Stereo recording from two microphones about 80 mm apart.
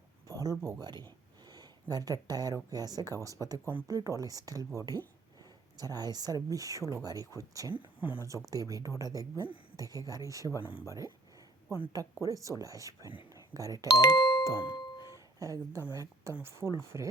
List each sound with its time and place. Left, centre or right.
0.3 s speech: right
0.8 s speech: right
7.8 s speech: left
8.2 s speech: right
13.3 s doorbell: right
13.9 s speech: left
14.5 s music: left
15.4 s speech: right
16.3 s speech: right